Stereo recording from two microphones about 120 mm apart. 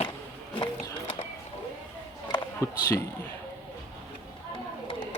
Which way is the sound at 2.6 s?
25° left (ahead or behind).